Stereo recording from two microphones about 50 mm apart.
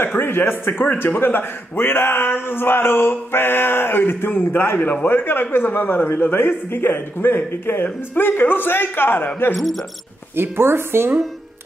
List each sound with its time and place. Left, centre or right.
0.0 s a man's voice: left
10.3 s a woman's voice: right